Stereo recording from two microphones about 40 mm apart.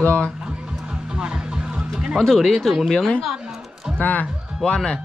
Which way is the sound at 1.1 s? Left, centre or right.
Right.